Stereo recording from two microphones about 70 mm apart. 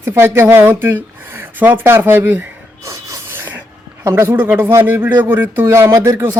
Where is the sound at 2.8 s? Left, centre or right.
Right.